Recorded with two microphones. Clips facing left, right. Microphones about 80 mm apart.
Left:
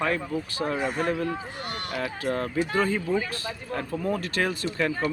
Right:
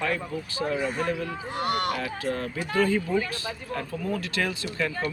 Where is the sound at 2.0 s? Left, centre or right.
Left.